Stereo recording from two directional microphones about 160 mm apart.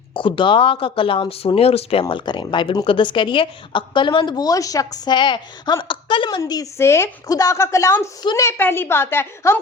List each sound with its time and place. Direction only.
0.1 s a woman's voice: 30° left (ahead or behind); by 9.6 s 15° left (ahead or behind)